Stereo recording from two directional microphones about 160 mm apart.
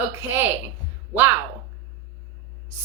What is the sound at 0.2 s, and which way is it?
Speech, 10° right (ahead or behind).